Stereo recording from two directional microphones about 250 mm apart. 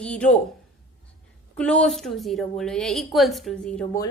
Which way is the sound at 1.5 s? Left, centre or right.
Centre.